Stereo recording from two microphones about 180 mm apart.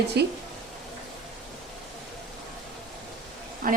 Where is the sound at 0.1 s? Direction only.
65° right (ahead or behind).